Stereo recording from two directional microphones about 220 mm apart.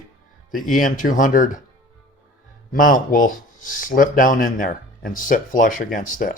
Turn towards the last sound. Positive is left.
turn(degrees=40)  # may be behind; listen again after turning